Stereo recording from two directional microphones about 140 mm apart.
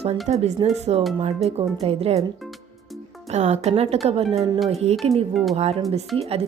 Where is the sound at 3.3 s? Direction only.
50° right (ahead or behind).